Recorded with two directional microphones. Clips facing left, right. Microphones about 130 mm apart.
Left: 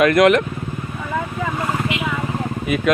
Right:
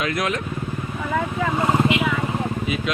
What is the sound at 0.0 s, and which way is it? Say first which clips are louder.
Speech: left 11 dB; 65° left (ahead or behind).